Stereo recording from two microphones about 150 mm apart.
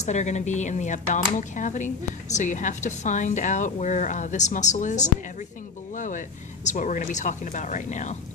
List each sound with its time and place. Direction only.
0.0 s a woman's voice: 50° left (ahead or behind)